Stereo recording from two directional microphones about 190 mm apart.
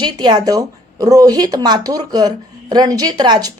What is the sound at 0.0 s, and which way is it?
Speech, 20° right (ahead or behind).